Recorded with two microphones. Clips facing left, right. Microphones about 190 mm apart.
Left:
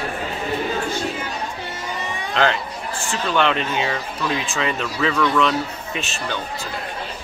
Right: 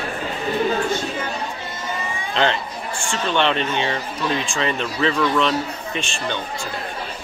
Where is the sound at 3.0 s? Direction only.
5° left (ahead or behind).